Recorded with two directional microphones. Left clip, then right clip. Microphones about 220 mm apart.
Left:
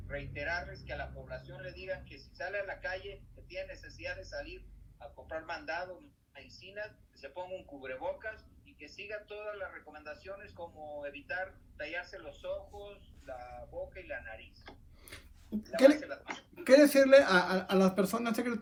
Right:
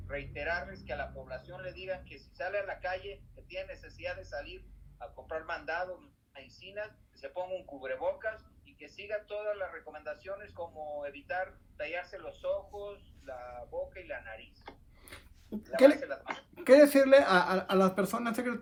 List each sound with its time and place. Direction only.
0.1 s a man's voice: 30° right (ahead or behind)
16.0 s a man's voice: 30° right (ahead or behind)
16.6 s a man's voice: 40° right (ahead or behind); by 18.6 s 10° right (ahead or behind)